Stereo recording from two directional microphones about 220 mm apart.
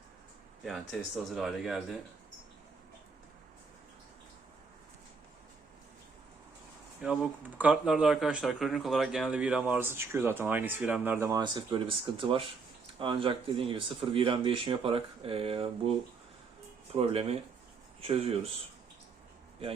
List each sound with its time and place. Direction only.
0.6 s speech: centre (ahead or behind)
7.0 s speech: 5° right (ahead or behind); by 15.9 s 25° right (ahead or behind)
16.9 s speech: 25° right (ahead or behind)